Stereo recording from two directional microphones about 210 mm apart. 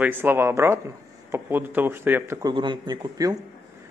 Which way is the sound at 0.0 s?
10° right (ahead or behind).